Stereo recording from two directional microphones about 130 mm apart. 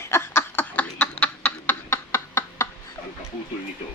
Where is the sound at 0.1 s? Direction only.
15° left (ahead or behind).